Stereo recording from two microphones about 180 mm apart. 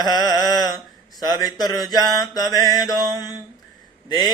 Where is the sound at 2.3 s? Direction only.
20° left (ahead or behind).